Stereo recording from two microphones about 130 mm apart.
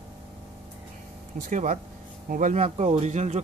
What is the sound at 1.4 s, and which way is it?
Speech, 75° right (ahead or behind).